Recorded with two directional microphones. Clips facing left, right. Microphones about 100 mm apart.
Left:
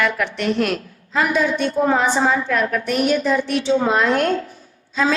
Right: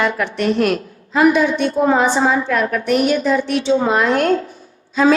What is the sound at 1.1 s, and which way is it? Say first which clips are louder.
A woman's voice: right 5 dB; 15° right (ahead or behind).